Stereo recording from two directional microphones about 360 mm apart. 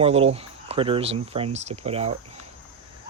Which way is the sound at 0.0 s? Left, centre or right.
Centre.